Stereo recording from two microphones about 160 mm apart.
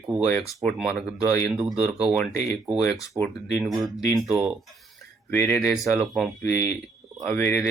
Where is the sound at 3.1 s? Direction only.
30° right (ahead or behind).